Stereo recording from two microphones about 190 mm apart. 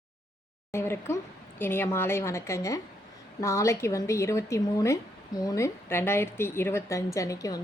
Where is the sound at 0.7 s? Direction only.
10° left (ahead or behind).